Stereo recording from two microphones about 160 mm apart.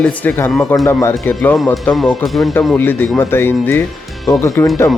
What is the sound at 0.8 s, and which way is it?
Speech, 15° left (ahead or behind).